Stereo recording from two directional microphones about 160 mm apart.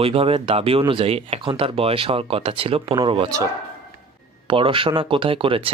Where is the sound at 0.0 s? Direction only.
35° right (ahead or behind).